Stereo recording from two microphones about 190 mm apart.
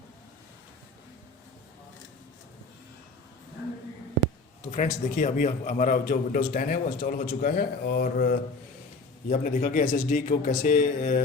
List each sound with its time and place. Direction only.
4.7 s a man's voice: 40° left (ahead or behind)